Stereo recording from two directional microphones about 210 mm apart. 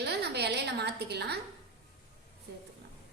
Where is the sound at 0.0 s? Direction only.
50° right (ahead or behind).